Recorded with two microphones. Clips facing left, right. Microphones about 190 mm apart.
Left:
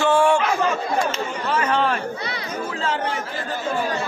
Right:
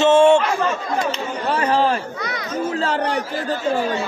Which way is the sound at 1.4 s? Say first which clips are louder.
Right 3 dB; 35° right (ahead or behind).